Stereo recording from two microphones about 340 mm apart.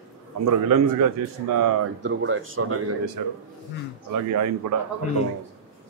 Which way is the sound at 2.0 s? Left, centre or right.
Right.